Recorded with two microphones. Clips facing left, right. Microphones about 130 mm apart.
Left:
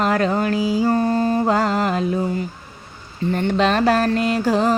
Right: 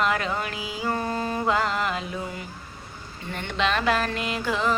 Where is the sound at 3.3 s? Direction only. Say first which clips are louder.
Left 8 dB; 40° left (ahead or behind).